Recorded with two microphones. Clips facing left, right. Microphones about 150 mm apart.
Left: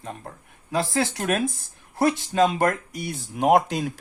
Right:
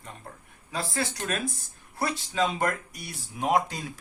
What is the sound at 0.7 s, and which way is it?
Speech, 80° left.